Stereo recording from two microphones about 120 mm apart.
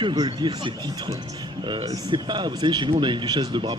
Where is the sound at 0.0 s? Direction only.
45° right (ahead or behind).